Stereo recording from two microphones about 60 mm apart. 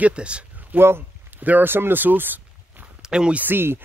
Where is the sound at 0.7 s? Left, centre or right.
Right.